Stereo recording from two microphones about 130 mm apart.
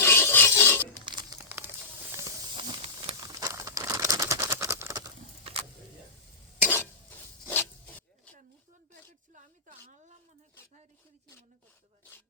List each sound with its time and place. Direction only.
0.0 s filing: 20° left (ahead or behind)
0.9 s crumpling: 30° right (ahead or behind)
1.4 s crumpling: 20° right (ahead or behind)
2.6 s hiss: 45° right (ahead or behind)
3.2 s a sound: 30° right (ahead or behind)
5.4 s a sound: 50° right (ahead or behind)
6.6 s stir: 15° left (ahead or behind)
7.4 s zipper: 15° left (ahead or behind)
9.3 s a sound: 75° right (ahead or behind)